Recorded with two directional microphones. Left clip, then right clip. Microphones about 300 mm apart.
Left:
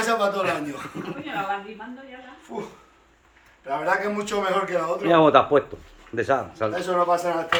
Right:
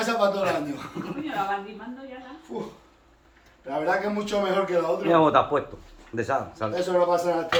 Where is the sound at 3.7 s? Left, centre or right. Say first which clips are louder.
Left 2 dB; centre.